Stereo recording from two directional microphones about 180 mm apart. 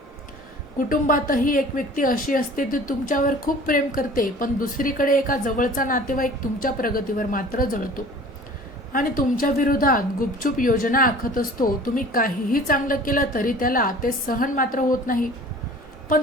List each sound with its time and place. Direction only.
0.9 s a woman's voice: 50° left (ahead or behind)